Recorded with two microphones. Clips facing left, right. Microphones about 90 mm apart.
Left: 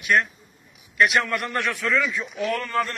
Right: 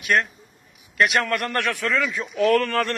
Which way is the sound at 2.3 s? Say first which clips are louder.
Right 7 dB; 70° right (ahead or behind).